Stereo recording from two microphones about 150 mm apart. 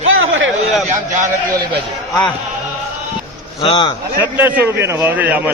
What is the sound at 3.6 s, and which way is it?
Speech, 35° left (ahead or behind).